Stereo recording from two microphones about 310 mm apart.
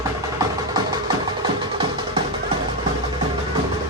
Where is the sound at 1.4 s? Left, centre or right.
Centre.